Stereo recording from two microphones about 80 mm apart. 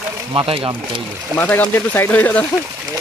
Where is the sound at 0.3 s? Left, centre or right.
Right.